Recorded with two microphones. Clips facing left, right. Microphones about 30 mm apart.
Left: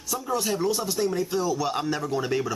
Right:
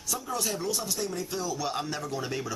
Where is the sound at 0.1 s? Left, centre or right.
Centre.